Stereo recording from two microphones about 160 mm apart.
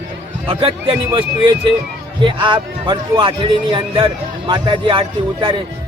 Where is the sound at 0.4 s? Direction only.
35° right (ahead or behind).